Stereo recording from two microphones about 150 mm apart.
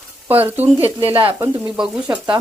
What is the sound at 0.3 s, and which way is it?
Speech, 10° right (ahead or behind).